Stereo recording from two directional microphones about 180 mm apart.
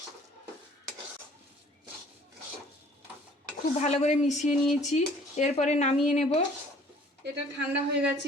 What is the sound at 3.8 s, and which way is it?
Speech, 40° left (ahead or behind).